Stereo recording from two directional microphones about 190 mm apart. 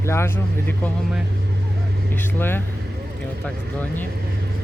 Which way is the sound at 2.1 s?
10° left (ahead or behind).